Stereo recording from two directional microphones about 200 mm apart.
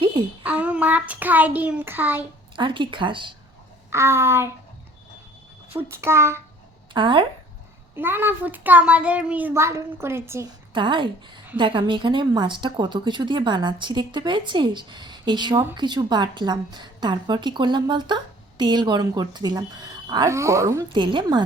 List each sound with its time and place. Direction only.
0.4 s a child's voice: 5° right (ahead or behind)
2.6 s a woman's voice: 25° right (ahead or behind)
3.8 s a child's voice: 15° right (ahead or behind)
5.7 s a child's voice: 15° right (ahead or behind)
6.9 s a woman's voice: 25° right (ahead or behind)
7.9 s a child's voice: 10° right (ahead or behind)
10.8 s a woman's voice: 25° right (ahead or behind)